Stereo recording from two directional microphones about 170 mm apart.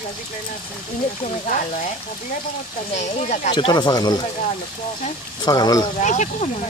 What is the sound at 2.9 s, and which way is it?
Speech, 40° left (ahead or behind).